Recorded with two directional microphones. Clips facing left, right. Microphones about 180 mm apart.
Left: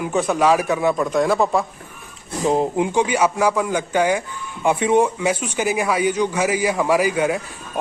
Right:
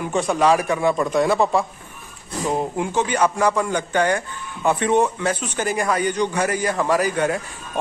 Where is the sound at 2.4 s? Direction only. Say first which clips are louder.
Left 5 dB; 20° left (ahead or behind).